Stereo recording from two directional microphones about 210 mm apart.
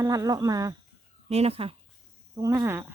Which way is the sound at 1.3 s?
30° right (ahead or behind).